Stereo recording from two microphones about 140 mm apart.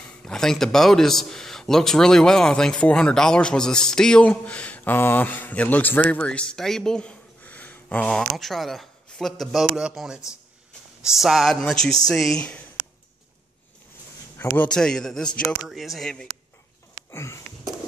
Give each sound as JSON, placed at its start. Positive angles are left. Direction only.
{"t": 0.2, "sound": "a man's voice", "side_deg": 5}
{"t": 14.4, "sound": "a man's voice", "side_deg": 15}
{"t": 14.7, "sound": "speech", "side_deg": 5}
{"t": 17.1, "sound": "sniff", "side_deg": 20}